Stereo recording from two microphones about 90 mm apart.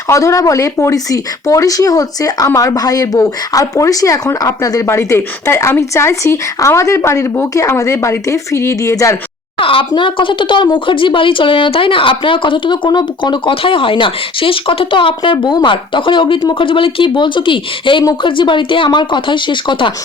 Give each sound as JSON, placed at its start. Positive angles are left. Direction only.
{"t": 0.1, "sound": "speech", "side_deg": 35}
{"t": 9.6, "sound": "speech", "side_deg": 80}